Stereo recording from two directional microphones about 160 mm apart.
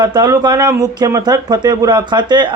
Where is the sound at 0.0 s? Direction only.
25° right (ahead or behind).